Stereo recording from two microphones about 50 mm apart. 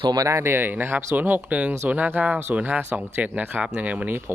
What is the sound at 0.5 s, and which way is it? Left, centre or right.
Speech, right.